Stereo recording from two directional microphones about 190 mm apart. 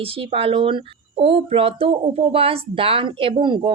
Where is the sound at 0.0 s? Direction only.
30° right (ahead or behind).